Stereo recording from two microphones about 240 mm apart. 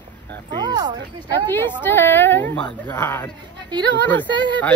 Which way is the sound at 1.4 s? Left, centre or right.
Centre.